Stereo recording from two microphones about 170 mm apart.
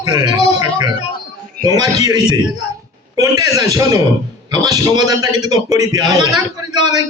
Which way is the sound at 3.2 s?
20° right (ahead or behind).